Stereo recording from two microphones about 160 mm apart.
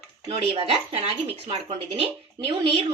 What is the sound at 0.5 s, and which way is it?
Speech, 35° right (ahead or behind).